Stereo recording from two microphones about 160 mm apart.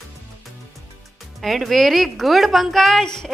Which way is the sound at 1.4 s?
Centre (ahead or behind).